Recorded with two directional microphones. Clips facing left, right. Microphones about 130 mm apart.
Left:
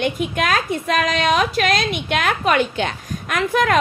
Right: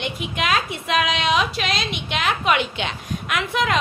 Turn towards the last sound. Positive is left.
turn(degrees=50)  # may be behind; listen again after turning